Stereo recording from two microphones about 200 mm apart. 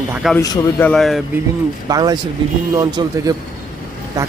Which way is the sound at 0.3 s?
20° left (ahead or behind).